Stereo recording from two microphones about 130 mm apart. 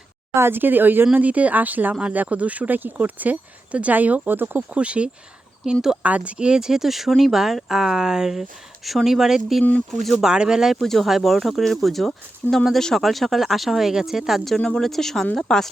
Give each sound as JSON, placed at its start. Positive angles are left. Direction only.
{"t": 0.3, "sound": "speech", "side_deg": -15}